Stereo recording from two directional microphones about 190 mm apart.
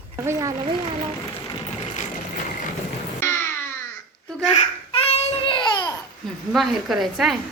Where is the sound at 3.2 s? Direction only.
10° left (ahead or behind).